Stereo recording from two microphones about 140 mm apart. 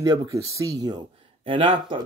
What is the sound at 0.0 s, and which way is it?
Speech, 25° right (ahead or behind).